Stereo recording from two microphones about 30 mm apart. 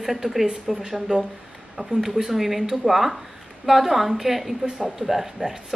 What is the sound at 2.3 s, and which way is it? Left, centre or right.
A woman's voice, centre.